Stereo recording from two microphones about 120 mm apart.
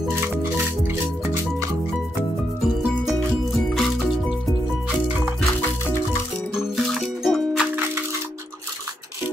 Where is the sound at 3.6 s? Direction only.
Centre (ahead or behind).